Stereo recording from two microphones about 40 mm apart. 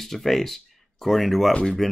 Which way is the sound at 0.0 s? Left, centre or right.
Centre.